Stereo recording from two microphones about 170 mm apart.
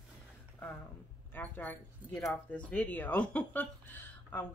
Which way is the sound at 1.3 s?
10° left (ahead or behind).